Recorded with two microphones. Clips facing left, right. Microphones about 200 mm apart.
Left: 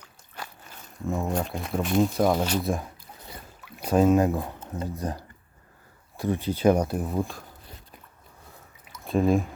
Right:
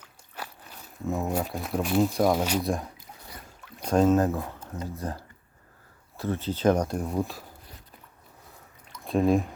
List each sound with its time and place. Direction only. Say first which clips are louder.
0.0 s speech: even; 5° right (ahead or behind)
2.6 s speech: left 1 dB; centre (ahead or behind)
8.9 s a sound: even; centre (ahead or behind)